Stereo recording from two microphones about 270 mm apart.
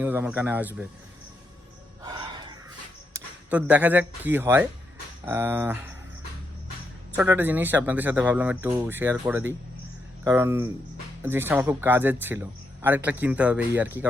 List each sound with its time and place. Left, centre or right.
0.0 s speech: centre
2.0 s a sound: centre
3.1 s speech: centre
7.2 s speech: centre